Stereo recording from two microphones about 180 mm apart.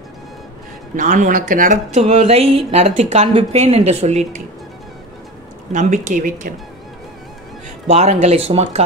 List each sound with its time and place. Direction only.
0.9 s speech: 45° right (ahead or behind)
5.7 s speech: 45° right (ahead or behind)
7.9 s speech: 40° right (ahead or behind)